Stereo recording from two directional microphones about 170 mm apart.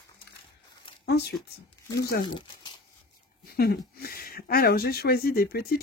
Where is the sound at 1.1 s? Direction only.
75° left (ahead or behind).